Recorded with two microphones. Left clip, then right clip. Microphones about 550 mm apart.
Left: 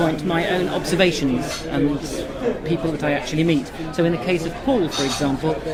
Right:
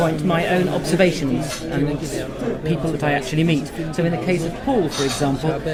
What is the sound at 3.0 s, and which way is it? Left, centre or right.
Speech, right.